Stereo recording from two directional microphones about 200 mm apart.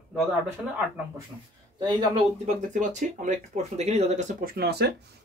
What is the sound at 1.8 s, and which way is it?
Speech, 20° right (ahead or behind).